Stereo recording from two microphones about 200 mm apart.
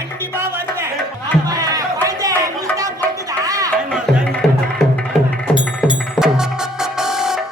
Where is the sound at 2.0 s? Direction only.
15° right (ahead or behind).